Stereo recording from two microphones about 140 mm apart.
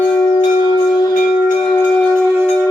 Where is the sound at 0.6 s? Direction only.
25° left (ahead or behind).